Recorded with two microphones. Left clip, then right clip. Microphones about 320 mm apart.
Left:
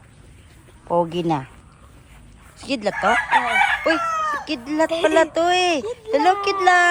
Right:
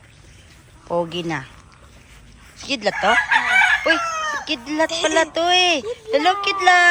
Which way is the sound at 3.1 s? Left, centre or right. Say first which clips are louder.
Right 3 dB; left.